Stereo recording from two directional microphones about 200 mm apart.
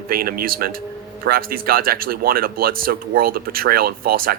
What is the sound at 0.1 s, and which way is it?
Speech, 45° right (ahead or behind).